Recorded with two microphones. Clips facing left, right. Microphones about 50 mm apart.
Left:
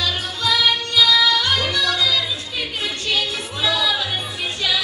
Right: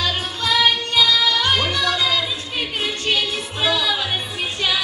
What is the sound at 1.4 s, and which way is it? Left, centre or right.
Music, right.